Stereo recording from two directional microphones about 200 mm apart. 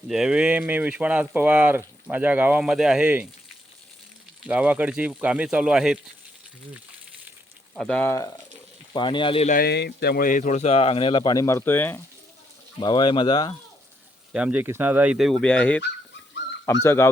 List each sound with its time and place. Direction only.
0.1 s speech: 5° right (ahead or behind)
4.4 s speech: 5° right (ahead or behind)
7.8 s speech: 5° left (ahead or behind)
8.9 s speech: 25° left (ahead or behind)
9.5 s speech: 50° left (ahead or behind); by 11.9 s 10° left (ahead or behind)
12.8 s speech: 20° left (ahead or behind)
14.3 s speech: 5° right (ahead or behind)
16.8 s speech: 15° left (ahead or behind)